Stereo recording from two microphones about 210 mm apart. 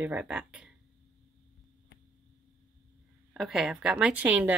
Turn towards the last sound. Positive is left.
turn(degrees=-5)  # may be behind; listen again after turning